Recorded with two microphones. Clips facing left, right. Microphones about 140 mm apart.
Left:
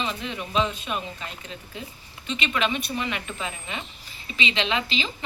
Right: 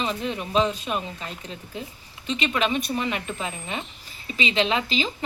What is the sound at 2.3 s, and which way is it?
A woman's voice, 35° right (ahead or behind).